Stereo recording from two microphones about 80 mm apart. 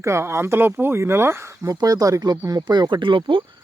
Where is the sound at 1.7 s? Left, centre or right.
Right.